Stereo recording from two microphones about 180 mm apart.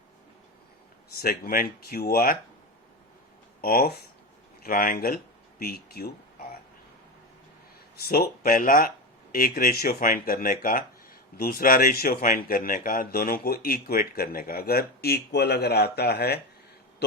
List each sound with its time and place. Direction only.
1.2 s speech: 55° left (ahead or behind)
3.6 s speech: 60° left (ahead or behind)
7.9 s speech: 60° left (ahead or behind)